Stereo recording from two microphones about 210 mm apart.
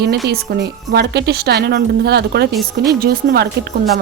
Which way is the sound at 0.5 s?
45° right (ahead or behind).